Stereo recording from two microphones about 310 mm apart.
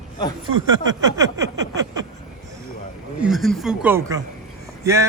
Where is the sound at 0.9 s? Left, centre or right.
Centre.